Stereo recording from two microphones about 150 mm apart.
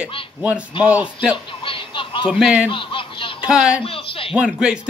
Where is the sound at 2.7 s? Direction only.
35° left (ahead or behind).